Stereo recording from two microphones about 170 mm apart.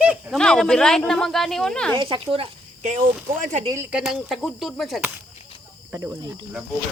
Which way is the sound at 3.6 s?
15° right (ahead or behind).